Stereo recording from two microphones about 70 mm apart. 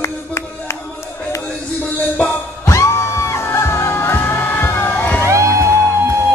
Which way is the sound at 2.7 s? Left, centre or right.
Left.